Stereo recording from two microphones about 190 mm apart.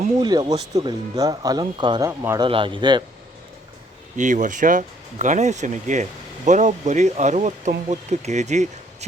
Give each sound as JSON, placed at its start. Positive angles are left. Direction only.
{"t": 0.2, "sound": "speech", "side_deg": -20}
{"t": 2.5, "sound": "speech", "side_deg": -25}
{"t": 4.2, "sound": "speech", "side_deg": -40}